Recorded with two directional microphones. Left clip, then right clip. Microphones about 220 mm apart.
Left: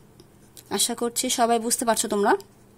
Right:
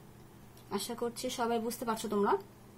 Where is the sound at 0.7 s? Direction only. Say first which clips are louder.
Left 10 dB; 45° left (ahead or behind).